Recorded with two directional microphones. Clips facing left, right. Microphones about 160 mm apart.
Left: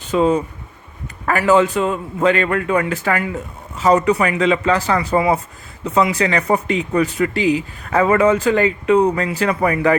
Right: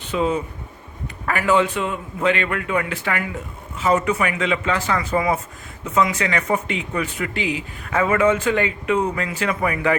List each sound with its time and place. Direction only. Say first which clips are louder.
0.1 s speech: left 6 dB; 40° left (ahead or behind)